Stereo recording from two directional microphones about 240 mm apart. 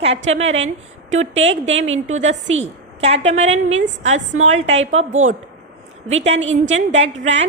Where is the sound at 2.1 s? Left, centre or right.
Right.